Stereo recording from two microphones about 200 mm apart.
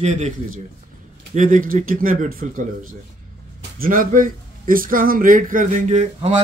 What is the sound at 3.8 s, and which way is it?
A man's voice, 45° right (ahead or behind).